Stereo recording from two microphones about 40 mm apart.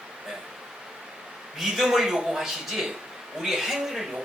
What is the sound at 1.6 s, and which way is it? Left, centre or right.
A man's voice, centre.